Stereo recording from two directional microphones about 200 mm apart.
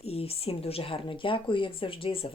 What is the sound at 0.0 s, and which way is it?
Speech, 30° left (ahead or behind).